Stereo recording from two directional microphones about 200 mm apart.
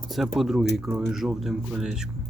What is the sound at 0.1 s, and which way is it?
Speech, centre (ahead or behind).